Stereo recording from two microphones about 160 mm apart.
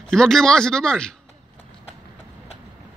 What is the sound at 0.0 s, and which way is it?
Speech, 5° left (ahead or behind).